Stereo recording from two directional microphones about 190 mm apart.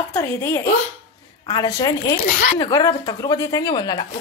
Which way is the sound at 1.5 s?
20° left (ahead or behind).